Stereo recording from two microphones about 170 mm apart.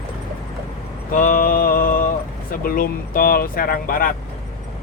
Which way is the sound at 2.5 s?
60° left (ahead or behind).